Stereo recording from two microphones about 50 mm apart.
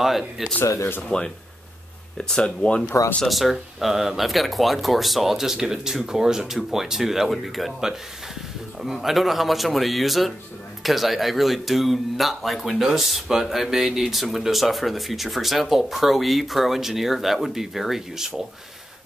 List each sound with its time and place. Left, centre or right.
0.4 s speech: centre
1.0 s speech: centre
3.3 s speech: centre